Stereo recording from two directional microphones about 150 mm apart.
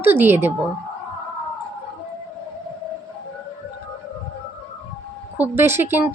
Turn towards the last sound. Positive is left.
turn(degrees=-15)  # may be behind; listen again after turning